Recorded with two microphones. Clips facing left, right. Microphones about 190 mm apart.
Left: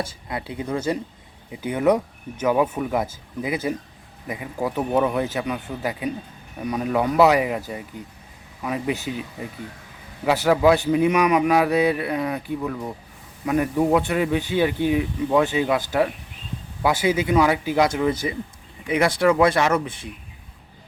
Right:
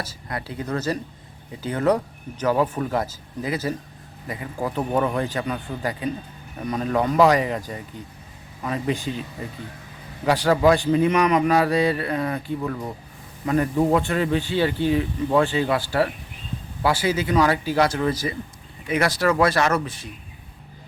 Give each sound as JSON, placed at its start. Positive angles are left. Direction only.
{"t": 0.0, "sound": "a man's voice", "side_deg": 20}
{"t": 8.6, "sound": "a man's voice", "side_deg": 10}